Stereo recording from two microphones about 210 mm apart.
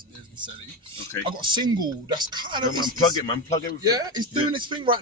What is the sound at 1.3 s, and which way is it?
Speech, 20° right (ahead or behind).